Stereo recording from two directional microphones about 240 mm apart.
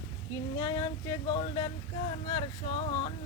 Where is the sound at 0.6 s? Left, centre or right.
Centre.